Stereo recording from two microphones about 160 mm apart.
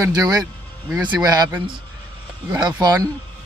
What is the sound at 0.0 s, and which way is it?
Speech, 25° right (ahead or behind).